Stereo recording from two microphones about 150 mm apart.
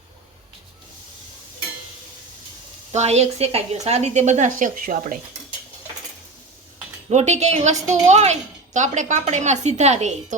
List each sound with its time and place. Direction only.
2.9 s a woman's voice: 45° right (ahead or behind); by 5.1 s 65° right (ahead or behind)
7.1 s a woman's voice: 50° right (ahead or behind)